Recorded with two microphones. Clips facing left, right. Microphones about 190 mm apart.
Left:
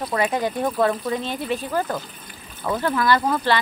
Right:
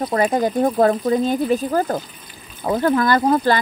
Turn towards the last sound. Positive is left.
turn(degrees=-40)  # may be behind; listen again after turning